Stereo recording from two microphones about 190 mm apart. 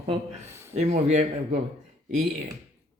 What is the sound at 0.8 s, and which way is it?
Speech, 35° right (ahead or behind).